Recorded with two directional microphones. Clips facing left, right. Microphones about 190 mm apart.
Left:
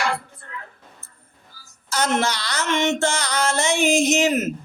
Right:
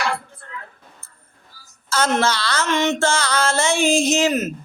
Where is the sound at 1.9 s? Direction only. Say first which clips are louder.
Right 2 dB; 15° left (ahead or behind).